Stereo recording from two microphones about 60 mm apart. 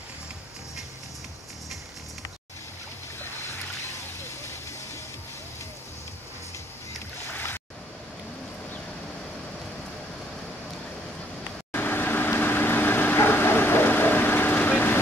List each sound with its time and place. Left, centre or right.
7.3 s waves: left
11.7 s vehicle: left
14.5 s vehicle: left